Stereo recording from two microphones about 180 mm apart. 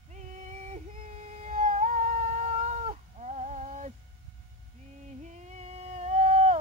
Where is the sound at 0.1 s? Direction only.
40° right (ahead or behind).